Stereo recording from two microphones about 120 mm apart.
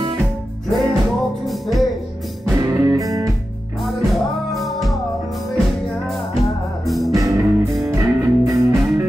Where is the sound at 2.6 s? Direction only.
25° right (ahead or behind).